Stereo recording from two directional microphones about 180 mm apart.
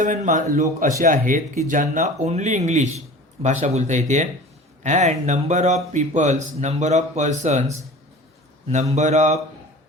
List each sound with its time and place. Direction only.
0.0 s speech: 45° right (ahead or behind)